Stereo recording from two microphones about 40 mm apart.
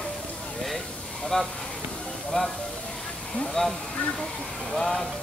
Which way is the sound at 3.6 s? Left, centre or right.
Left.